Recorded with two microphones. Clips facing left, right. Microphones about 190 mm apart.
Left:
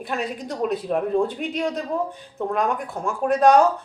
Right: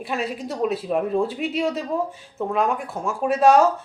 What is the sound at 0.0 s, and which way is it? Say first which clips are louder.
Speech: right 1 dB; centre (ahead or behind).